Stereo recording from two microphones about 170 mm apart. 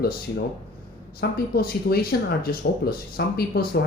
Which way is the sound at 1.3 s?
60° left (ahead or behind).